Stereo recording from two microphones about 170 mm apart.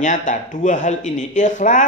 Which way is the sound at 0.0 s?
45° left (ahead or behind).